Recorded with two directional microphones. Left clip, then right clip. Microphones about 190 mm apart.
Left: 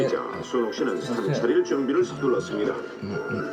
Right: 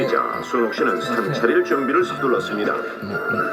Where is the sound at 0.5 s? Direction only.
30° right (ahead or behind).